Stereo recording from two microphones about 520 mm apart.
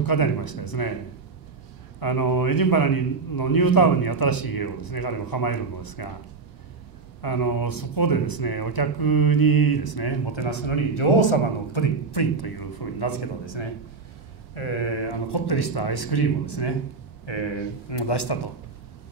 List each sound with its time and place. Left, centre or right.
0.0 s speech: left
2.0 s speech: left
7.2 s speech: left
14.5 s speech: left